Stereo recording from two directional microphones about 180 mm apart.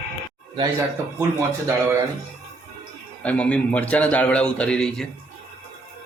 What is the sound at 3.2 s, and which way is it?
A man's voice, 5° left (ahead or behind).